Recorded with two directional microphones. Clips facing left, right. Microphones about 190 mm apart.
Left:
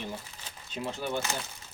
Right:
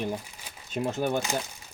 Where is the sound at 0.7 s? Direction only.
45° right (ahead or behind).